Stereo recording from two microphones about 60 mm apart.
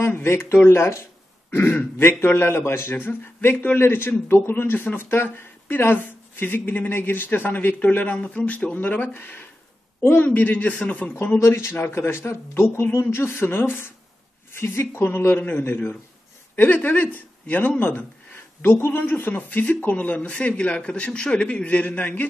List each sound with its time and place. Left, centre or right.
0.1 s speech: left
1.5 s speech: left
11.3 s speech: left